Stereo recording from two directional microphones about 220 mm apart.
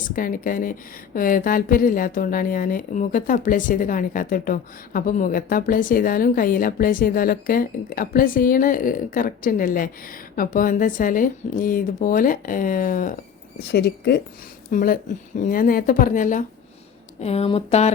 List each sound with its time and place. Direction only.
0.2 s a woman's voice: 40° left (ahead or behind)
13.6 s a woman's voice: 50° left (ahead or behind); by 17.9 s 30° left (ahead or behind)